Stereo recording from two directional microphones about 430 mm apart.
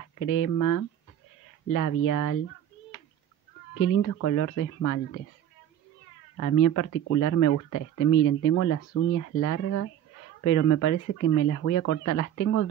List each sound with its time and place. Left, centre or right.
0.2 s speech: left
3.8 s speech: left
6.3 s speech: left